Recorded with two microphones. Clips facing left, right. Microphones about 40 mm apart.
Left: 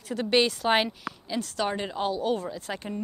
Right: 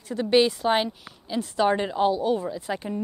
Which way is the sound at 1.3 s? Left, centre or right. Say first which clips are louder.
Right 6 dB; centre.